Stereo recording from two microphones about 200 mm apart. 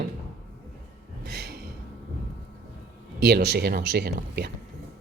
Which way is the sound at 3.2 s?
55° right (ahead or behind).